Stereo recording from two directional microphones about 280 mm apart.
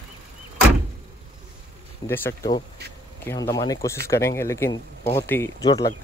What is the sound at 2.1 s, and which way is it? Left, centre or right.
Speech, centre.